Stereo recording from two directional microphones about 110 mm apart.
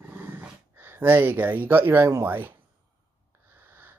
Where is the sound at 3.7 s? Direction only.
20° right (ahead or behind).